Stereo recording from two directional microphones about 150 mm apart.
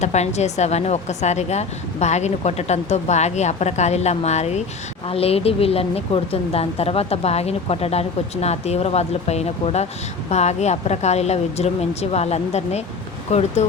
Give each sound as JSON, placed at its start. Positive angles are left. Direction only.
{"t": 0.0, "sound": "speech", "side_deg": 50}